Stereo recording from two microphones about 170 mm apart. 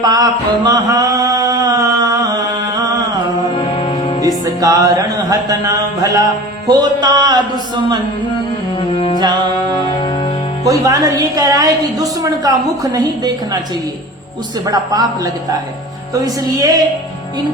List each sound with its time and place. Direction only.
0.0 s mantra: 25° right (ahead or behind)
2.7 s music: 20° right (ahead or behind)
3.5 s mantra: 35° left (ahead or behind)
4.6 s mantra: 20° right (ahead or behind)
9.0 s music: 35° left (ahead or behind)
9.7 s music: 25° left (ahead or behind)
10.6 s mantra: 20° right (ahead or behind)
14.6 s mantra: 20° right (ahead or behind)